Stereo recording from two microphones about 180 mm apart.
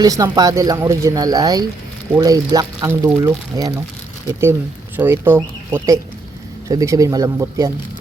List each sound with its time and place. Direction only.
0.0 s speech: 20° right (ahead or behind)
4.9 s speech: 10° right (ahead or behind)